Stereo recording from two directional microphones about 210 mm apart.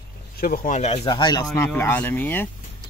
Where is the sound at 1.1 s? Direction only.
20° left (ahead or behind).